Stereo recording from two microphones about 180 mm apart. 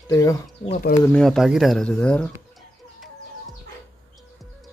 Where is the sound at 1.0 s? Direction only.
5° left (ahead or behind).